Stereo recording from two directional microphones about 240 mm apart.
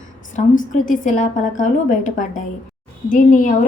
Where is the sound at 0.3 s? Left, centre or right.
Left.